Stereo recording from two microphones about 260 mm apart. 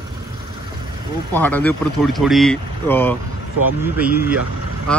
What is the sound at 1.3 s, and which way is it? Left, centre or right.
Speech, centre.